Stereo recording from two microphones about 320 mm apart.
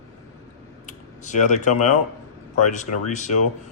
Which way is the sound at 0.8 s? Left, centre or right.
Left.